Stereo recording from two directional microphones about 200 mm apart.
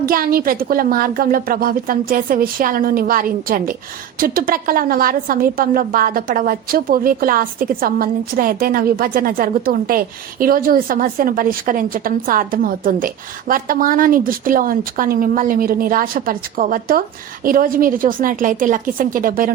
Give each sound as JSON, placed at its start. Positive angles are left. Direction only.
{"t": 0.1, "sound": "a woman's voice", "side_deg": -45}